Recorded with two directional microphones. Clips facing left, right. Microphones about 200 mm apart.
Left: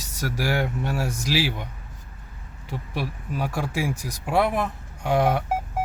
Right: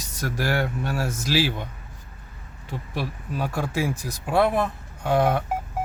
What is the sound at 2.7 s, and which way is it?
Speech, 10° left (ahead or behind).